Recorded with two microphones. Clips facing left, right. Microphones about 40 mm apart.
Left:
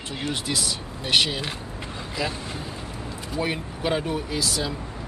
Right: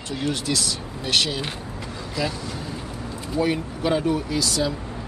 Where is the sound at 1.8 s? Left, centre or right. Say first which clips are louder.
Right 2 dB; left.